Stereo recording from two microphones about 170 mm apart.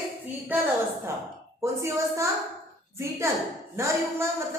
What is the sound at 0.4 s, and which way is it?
Speech, 10° right (ahead or behind).